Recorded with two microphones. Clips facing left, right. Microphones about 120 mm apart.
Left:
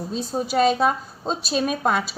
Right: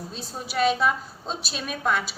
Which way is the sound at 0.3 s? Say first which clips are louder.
Left 4 dB; 40° left (ahead or behind).